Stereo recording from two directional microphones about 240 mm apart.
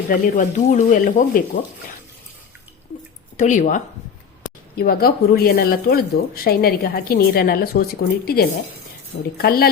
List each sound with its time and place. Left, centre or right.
0.1 s speech: left
3.3 s speech: left
4.8 s speech: left